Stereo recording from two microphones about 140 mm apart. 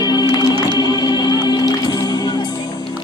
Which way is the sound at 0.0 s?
30° left (ahead or behind).